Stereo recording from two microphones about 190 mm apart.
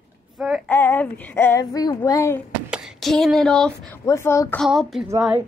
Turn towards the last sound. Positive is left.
turn(degrees=-10)  # may be behind; listen again after turning